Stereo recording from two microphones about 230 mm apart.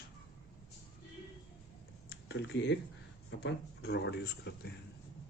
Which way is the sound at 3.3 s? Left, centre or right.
Left.